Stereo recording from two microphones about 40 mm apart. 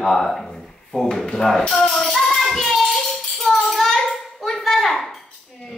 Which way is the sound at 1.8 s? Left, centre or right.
Centre.